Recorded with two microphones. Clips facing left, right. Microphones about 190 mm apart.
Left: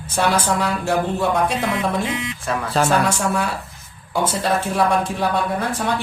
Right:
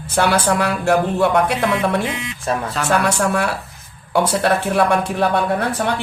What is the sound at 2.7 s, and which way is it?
Speech, 35° left (ahead or behind).